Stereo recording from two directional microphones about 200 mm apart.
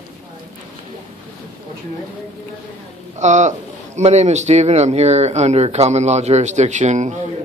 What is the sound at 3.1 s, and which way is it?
Speech, 35° right (ahead or behind).